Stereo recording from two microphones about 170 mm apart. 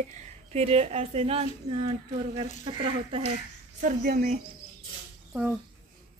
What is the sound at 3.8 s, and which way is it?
Speech, 55° right (ahead or behind).